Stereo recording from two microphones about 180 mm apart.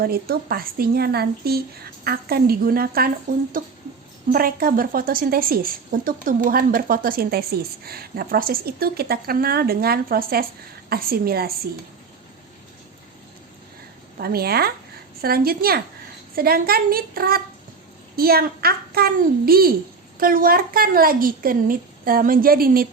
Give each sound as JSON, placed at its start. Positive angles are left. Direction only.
{"t": 0.0, "sound": "a woman's voice", "side_deg": -55}
{"t": 14.2, "sound": "a woman's voice", "side_deg": -60}